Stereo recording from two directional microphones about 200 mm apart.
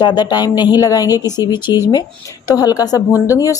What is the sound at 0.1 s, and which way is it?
A woman's voice, 20° left (ahead or behind).